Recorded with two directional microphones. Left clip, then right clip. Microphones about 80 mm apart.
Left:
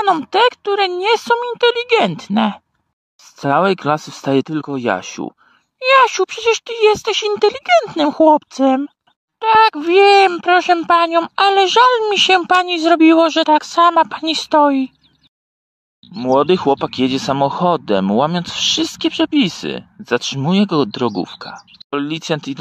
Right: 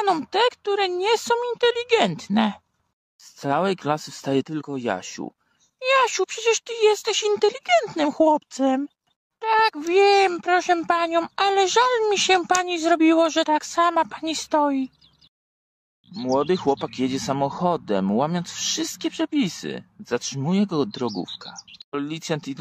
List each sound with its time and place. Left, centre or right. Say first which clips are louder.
0.0 s speech: left 7 dB; centre
0.3 s speech: left 7 dB; left
6.1 s speech: left 6 dB; left
14.2 s speech: left 9 dB; left
16.3 s speech: left 8 dB; left
21.9 s speech: left 8 dB; left